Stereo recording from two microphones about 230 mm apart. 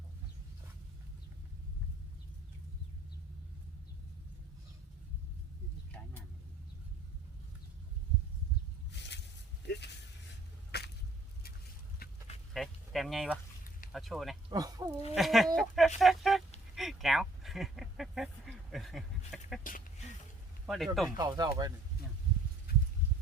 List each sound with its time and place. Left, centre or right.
8.9 s squish: left
9.6 s a sound: left
10.7 s squish: left
12.0 s duck: left
12.5 s a sound: centre
13.9 s speech: centre
14.5 s speech: centre
15.1 s speech: centre
16.7 s duck: centre
19.6 s a sound: left
20.7 s speech: centre
21.2 s speech: centre
22.7 s horse: left